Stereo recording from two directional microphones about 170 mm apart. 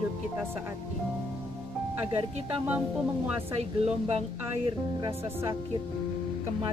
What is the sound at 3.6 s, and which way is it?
Speech, 35° right (ahead or behind).